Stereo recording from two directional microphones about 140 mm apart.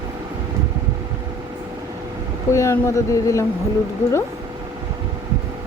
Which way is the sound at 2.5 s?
20° left (ahead or behind).